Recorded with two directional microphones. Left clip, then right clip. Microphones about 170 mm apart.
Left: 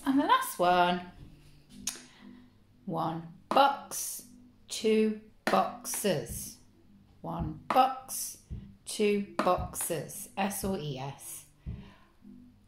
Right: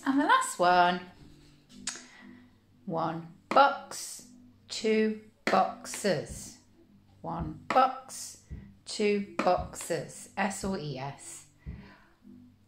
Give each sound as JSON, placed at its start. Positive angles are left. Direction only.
{"t": 0.0, "sound": "speech", "side_deg": 0}
{"t": 1.9, "sound": "music", "side_deg": 0}
{"t": 2.9, "sound": "a woman's voice", "side_deg": 5}